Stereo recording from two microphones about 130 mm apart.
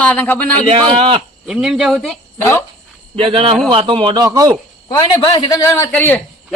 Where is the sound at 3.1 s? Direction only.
45° right (ahead or behind).